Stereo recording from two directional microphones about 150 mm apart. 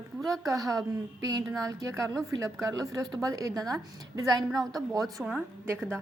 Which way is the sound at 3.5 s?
Centre (ahead or behind).